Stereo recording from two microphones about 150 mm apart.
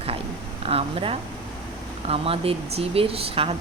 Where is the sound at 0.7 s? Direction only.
40° right (ahead or behind).